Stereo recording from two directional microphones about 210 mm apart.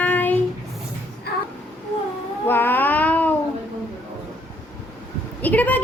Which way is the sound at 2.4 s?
10° left (ahead or behind).